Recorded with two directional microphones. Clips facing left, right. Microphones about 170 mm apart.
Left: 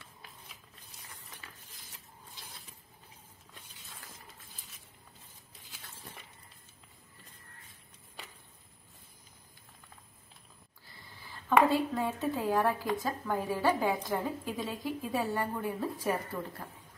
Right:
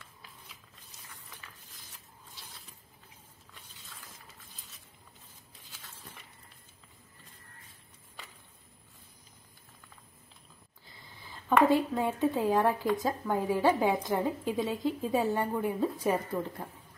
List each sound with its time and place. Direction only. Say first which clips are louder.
11.7 s a woman's voice: right 3 dB; 20° right (ahead or behind)